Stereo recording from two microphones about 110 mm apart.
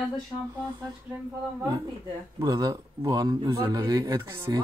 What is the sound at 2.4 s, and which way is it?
Speech, 35° right (ahead or behind).